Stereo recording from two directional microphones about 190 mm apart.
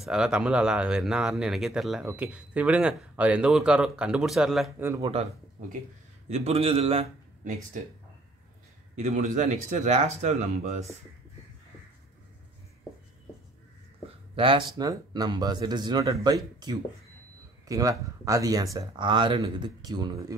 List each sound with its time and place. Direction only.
0.0 s speech: 5° right (ahead or behind)
4.8 s speech: 15° right (ahead or behind)
6.2 s a man's voice: 35° right (ahead or behind)
8.9 s speech: 40° right (ahead or behind)
14.3 s speech: 25° right (ahead or behind)